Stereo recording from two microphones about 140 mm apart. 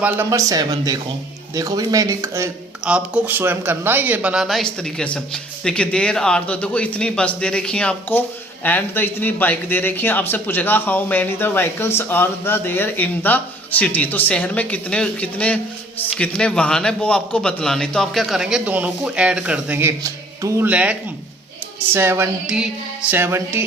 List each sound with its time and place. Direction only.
0.3 s speech: 25° right (ahead or behind)
2.8 s speech: 10° right (ahead or behind)
4.4 s a man's voice: 5° left (ahead or behind)
21.9 s speech: 15° right (ahead or behind)
22.4 s speech: 5° right (ahead or behind)